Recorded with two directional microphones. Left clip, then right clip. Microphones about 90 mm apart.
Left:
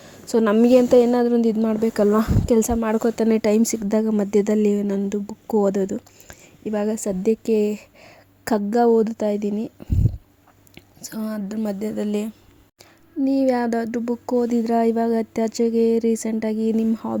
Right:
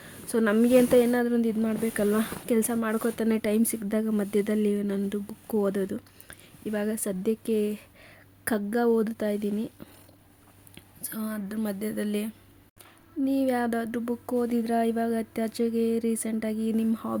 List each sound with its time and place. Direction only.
0.0 s a sound: 50° left (ahead or behind)
0.6 s speech: 85° left; by 2.7 s 60° left (ahead or behind)
2.8 s speech: 75° left (ahead or behind); by 4.9 s 50° left (ahead or behind)
4.9 s a woman's voice: 40° left (ahead or behind)
11.0 s speech: 55° left (ahead or behind)
11.5 s speech: 40° left (ahead or behind)
13.2 s speech: 50° left (ahead or behind)